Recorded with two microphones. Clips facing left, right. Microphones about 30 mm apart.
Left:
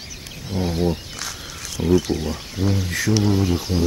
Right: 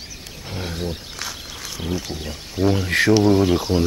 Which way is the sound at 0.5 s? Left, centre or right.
Right.